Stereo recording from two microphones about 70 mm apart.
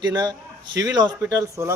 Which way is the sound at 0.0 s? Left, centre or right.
Right.